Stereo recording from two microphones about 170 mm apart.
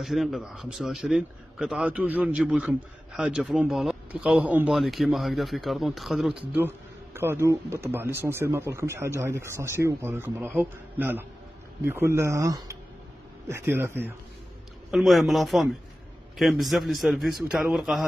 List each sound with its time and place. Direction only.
0.0 s a man's voice: centre (ahead or behind)
7.2 s speech: 15° right (ahead or behind)
14.9 s a man's voice: centre (ahead or behind)